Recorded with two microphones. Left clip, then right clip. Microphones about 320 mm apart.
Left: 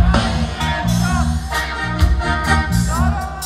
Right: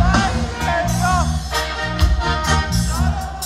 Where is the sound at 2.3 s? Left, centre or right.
Centre.